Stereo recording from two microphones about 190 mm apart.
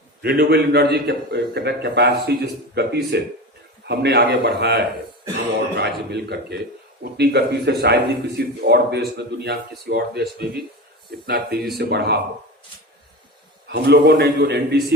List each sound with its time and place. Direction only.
0.2 s a man's voice: 55° right (ahead or behind)
13.7 s a man's voice: 60° right (ahead or behind)